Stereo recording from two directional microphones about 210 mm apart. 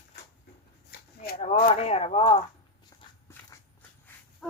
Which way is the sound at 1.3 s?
30° left (ahead or behind).